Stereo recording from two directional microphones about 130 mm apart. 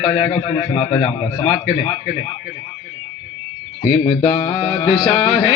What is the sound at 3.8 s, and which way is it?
Speech, 45° left (ahead or behind).